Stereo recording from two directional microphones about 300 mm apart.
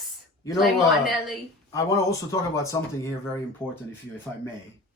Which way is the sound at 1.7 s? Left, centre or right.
Centre.